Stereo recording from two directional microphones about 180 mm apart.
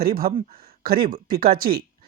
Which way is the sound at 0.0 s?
55° right (ahead or behind).